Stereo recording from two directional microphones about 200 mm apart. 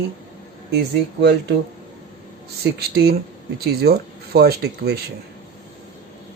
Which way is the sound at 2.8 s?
50° right (ahead or behind).